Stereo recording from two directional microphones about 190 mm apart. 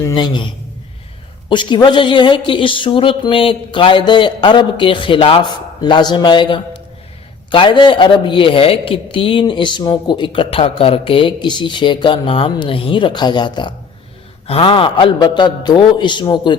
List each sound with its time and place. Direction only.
0.0 s speech: 25° left (ahead or behind)